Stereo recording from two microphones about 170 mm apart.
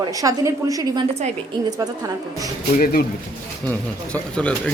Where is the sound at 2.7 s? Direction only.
60° left (ahead or behind).